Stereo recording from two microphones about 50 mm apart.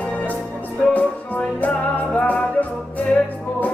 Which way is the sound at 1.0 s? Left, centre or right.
Left.